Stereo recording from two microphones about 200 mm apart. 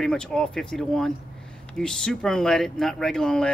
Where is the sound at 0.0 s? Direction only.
5° left (ahead or behind).